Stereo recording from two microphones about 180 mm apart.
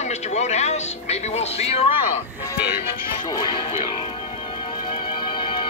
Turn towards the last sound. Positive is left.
turn(degrees=25)  # may be behind; listen again after turning